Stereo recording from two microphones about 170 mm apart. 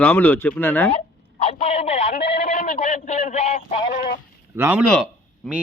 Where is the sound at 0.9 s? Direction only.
35° left (ahead or behind).